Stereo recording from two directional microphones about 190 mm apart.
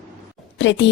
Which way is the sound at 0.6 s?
70° left (ahead or behind).